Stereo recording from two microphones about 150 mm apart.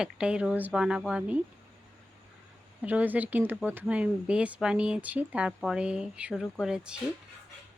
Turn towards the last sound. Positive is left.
turn(degrees=-5)  # may be behind; listen again after turning